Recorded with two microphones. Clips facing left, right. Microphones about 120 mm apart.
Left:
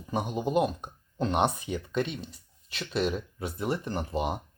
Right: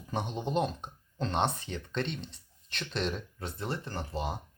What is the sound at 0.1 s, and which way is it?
Speech, 10° left (ahead or behind).